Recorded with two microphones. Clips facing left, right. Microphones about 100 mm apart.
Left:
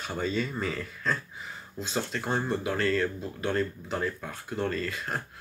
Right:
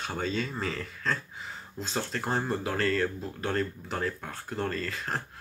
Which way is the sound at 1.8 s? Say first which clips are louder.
Left 1 dB; 40° right (ahead or behind).